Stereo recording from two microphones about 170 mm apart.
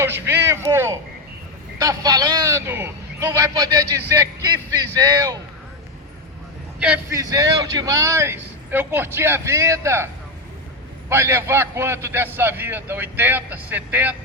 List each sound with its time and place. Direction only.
0.0 s a man's voice: 15° right (ahead or behind)
4.9 s a man's voice: 20° right (ahead or behind)
6.7 s a man's voice: 5° right (ahead or behind)
7.1 s a man's voice: 20° right (ahead or behind)
11.1 s a man's voice: 15° right (ahead or behind)